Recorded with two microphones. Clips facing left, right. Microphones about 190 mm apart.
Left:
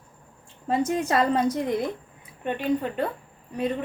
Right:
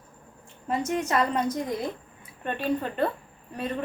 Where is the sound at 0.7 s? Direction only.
35° left (ahead or behind).